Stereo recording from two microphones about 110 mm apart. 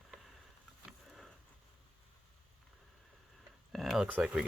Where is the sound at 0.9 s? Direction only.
5° right (ahead or behind).